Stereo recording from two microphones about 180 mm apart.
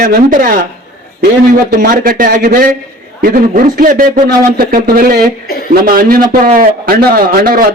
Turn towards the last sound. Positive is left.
turn(degrees=-55)  # may be behind; listen again after turning